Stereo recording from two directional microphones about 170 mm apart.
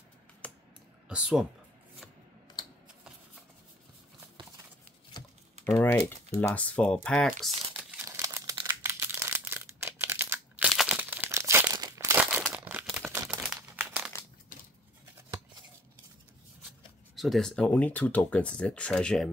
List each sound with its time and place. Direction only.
0.4 s a sound: 10° left (ahead or behind)
1.0 s speech: 5° right (ahead or behind)
5.8 s speech: 10° left (ahead or behind)
7.7 s crumpling: 15° right (ahead or behind)
8.6 s a sound: 15° right (ahead or behind)
10.7 s crumpling: 5° right (ahead or behind); by 12.2 s 20° right (ahead or behind)
12.2 s crumpling: 5° right (ahead or behind)
13.1 s crumpling: 20° right (ahead or behind)
17.1 s speech: centre (ahead or behind)